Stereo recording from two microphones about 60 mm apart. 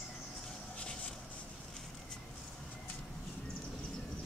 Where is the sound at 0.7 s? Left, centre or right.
Centre.